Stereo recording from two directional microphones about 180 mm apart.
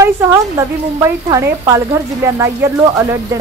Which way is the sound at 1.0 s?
15° right (ahead or behind).